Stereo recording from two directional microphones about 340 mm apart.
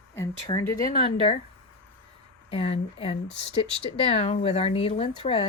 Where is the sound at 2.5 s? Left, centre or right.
Centre.